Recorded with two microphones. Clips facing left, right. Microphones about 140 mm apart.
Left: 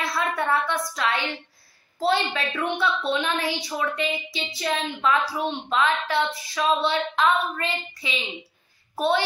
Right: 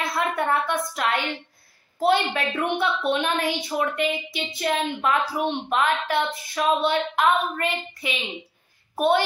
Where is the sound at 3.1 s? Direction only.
55° right (ahead or behind).